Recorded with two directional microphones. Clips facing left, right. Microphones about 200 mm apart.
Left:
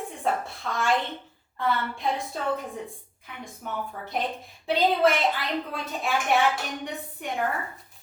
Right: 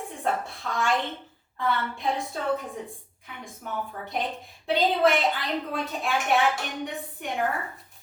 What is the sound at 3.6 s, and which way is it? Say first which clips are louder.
A woman's voice: even; centre (ahead or behind).